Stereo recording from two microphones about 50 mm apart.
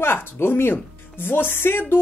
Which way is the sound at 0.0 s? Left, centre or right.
Left.